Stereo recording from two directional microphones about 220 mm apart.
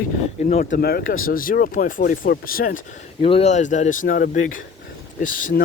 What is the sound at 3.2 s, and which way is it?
Speech, 25° left (ahead or behind).